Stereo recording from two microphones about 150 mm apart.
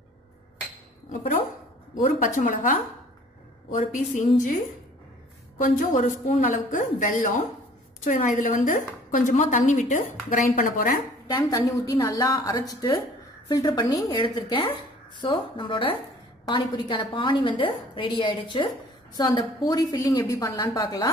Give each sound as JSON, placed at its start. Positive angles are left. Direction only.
{"t": 2.0, "sound": "a woman's voice", "side_deg": 60}
{"t": 3.9, "sound": "a woman's voice", "side_deg": 60}
{"t": 5.6, "sound": "a woman's voice", "side_deg": 60}
{"t": 11.2, "sound": "a woman's voice", "side_deg": 25}